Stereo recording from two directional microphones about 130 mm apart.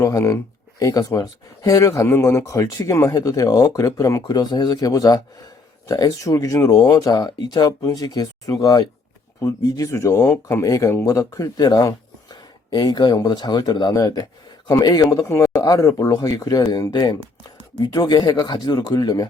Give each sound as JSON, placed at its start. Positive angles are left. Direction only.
{"t": 0.0, "sound": "speech", "side_deg": 25}